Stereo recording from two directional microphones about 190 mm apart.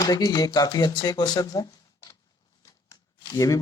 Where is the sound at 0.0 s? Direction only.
20° left (ahead or behind).